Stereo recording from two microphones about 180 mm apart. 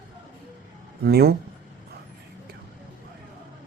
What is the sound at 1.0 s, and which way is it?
Speech, 60° right (ahead or behind).